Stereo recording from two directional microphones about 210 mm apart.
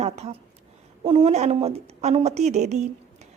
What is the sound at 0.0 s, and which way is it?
A woman's voice, 30° right (ahead or behind).